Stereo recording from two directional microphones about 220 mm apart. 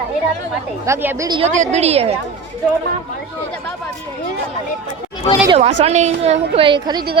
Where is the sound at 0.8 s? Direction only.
10° right (ahead or behind).